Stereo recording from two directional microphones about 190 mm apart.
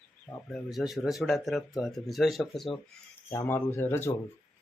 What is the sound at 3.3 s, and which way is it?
Speech, 10° left (ahead or behind).